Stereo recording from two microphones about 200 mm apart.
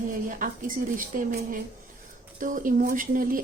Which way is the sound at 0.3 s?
45° right (ahead or behind).